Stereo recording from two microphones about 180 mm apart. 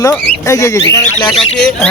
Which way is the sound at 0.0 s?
15° left (ahead or behind).